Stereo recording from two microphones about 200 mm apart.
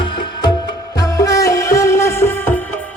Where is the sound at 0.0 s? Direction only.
25° left (ahead or behind).